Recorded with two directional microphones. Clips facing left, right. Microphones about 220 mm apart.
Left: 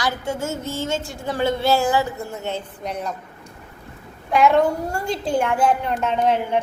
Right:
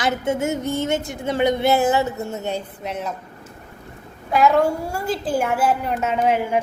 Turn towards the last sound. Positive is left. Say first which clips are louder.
# even
turn(degrees=-10)  # may be behind; listen again after turning